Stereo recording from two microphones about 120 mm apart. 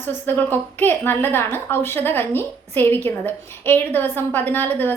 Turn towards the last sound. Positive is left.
turn(degrees=15)  # may be behind; listen again after turning